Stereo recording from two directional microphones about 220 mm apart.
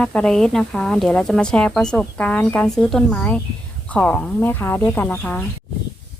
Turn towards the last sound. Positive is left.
turn(degrees=5)  # may be behind; listen again after turning